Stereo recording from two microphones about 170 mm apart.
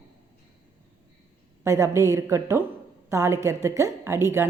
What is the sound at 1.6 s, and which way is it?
A woman's voice, 15° right (ahead or behind).